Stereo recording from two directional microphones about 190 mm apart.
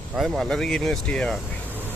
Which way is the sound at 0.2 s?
Centre (ahead or behind).